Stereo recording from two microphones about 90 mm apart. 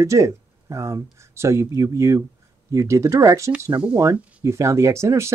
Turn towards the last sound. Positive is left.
turn(degrees=-30)  # may be behind; listen again after turning